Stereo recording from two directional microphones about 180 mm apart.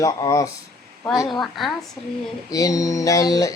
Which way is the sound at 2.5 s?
20° left (ahead or behind).